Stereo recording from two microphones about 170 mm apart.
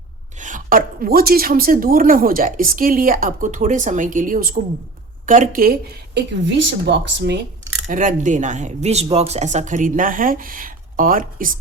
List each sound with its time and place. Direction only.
0.3 s a woman's voice: 50° right (ahead or behind); by 7.4 s 90° right
7.9 s speech: 50° right (ahead or behind)